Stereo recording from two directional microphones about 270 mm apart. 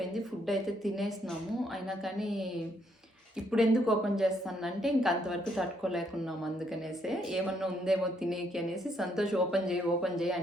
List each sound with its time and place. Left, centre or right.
0.0 s speech: centre
3.5 s speech: centre